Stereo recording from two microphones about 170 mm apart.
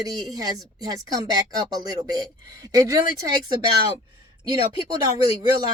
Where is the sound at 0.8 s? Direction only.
20° right (ahead or behind).